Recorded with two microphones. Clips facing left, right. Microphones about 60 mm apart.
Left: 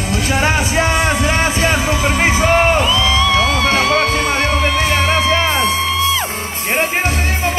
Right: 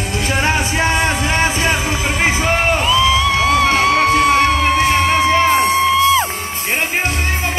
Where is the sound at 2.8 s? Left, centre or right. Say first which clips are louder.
Right 1 dB; centre.